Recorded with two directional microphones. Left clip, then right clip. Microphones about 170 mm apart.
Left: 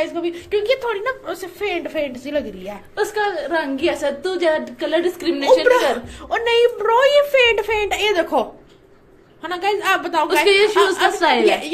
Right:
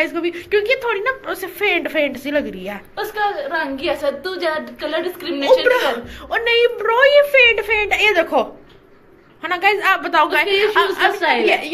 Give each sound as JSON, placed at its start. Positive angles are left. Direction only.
{"t": 0.0, "sound": "speech", "side_deg": 15}
{"t": 1.3, "sound": "a woman's voice", "side_deg": 10}
{"t": 3.0, "sound": "a woman's voice", "side_deg": 90}
{"t": 5.4, "sound": "a woman's voice", "side_deg": 35}
{"t": 8.0, "sound": "a woman's voice", "side_deg": 20}
{"t": 11.4, "sound": "speech", "side_deg": 30}